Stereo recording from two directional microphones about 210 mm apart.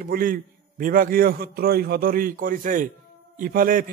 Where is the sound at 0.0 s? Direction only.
45° right (ahead or behind).